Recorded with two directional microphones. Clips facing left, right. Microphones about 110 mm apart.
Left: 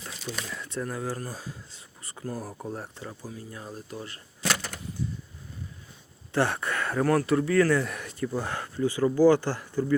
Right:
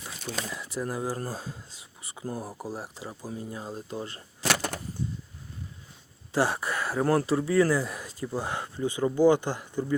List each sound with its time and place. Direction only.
0.5 s speech: 10° right (ahead or behind)
1.1 s speech: 30° right (ahead or behind)
1.7 s speech: 15° right (ahead or behind)
2.5 s speech: 5° right (ahead or behind)
3.2 s speech: 25° right (ahead or behind)
4.4 s a sound: 65° right (ahead or behind)
6.3 s a sound: 15° right (ahead or behind)
7.0 s speech: 25° right (ahead or behind)
7.9 s a sound: 25° right (ahead or behind)
8.4 s speech: 20° right (ahead or behind)